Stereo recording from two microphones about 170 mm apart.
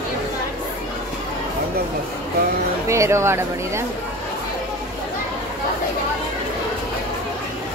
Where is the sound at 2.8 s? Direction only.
15° right (ahead or behind).